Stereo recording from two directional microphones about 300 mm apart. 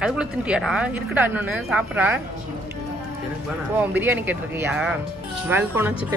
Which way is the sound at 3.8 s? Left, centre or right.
Centre.